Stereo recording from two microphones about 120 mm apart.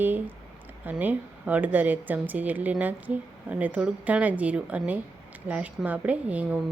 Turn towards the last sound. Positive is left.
turn(degrees=-10)  # may be behind; listen again after turning